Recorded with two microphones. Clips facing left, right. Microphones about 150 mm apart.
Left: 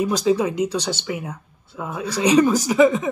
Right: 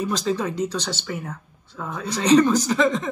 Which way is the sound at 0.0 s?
10° left (ahead or behind).